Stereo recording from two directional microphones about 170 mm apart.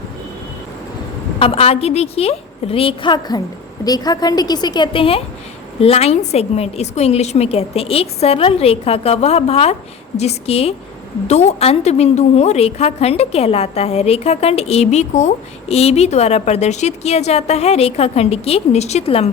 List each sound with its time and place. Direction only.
1.4 s a woman's voice: 35° left (ahead or behind)